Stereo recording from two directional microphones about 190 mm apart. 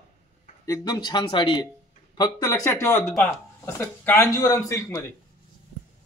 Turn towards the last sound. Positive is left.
turn(degrees=15)  # may be behind; listen again after turning